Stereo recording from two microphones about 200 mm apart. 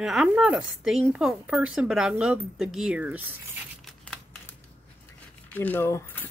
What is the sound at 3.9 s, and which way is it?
Crumpling, 5° left (ahead or behind).